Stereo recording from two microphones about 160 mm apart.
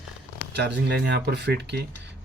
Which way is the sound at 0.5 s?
90° right.